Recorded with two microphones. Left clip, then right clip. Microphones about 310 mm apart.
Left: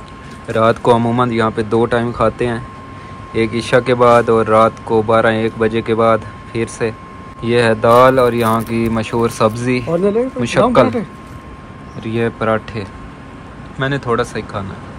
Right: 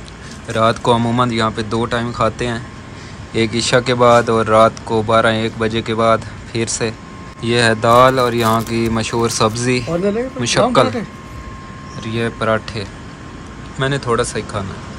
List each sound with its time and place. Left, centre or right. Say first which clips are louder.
0.5 s speech: left 2 dB; centre
12.0 s speech: left 2 dB; centre